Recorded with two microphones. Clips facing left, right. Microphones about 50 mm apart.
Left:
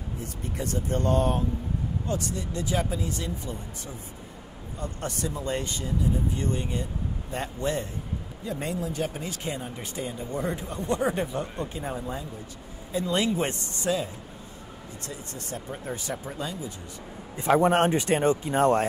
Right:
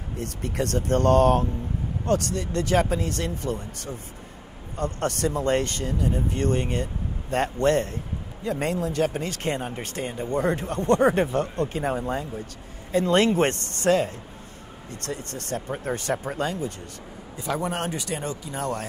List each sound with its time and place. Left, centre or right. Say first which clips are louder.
0.2 s speech: right 7 dB; right
17.4 s speech: left 7 dB; left